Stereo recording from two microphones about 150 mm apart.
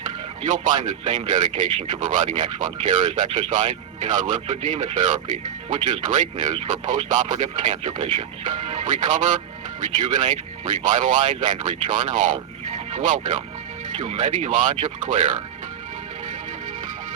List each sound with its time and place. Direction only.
0.4 s speech: 60° right (ahead or behind)
7.9 s speech: 40° right (ahead or behind); by 15.3 s 55° right (ahead or behind)